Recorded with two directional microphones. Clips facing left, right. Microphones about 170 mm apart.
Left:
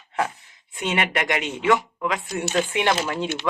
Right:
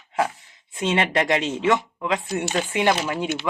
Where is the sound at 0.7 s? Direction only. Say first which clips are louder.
Right 2 dB; 25° right (ahead or behind).